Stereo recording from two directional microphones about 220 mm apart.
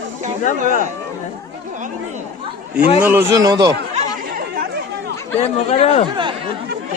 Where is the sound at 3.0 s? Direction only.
10° right (ahead or behind).